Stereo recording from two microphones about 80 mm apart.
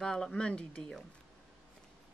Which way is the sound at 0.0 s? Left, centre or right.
Centre.